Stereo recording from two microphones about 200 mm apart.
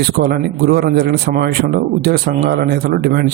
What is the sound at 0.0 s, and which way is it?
Speech, 55° right (ahead or behind).